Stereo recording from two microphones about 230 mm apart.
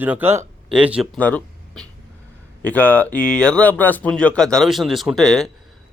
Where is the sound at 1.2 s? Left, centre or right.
Centre.